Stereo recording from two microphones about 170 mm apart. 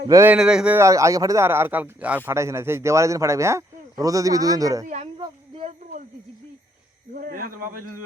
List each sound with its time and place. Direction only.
0.1 s speech: 15° right (ahead or behind)
0.3 s speech: 5° right (ahead or behind); by 4.9 s 20° right (ahead or behind)
4.9 s speech: 40° right (ahead or behind)
5.2 s a sound: 30° right (ahead or behind)
5.8 s a sound: 50° right (ahead or behind)
7.1 s speech: 55° right (ahead or behind)